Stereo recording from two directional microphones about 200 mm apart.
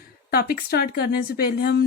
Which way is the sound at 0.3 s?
50° left (ahead or behind).